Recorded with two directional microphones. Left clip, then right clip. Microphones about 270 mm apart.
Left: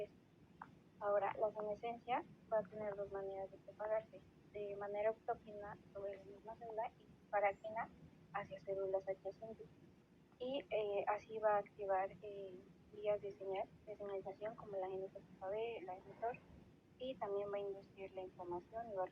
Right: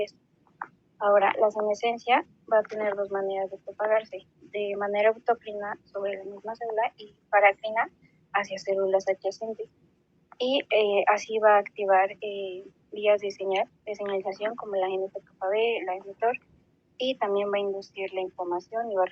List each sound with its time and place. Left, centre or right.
0.6 s a woman's voice: right
10.3 s a woman's voice: right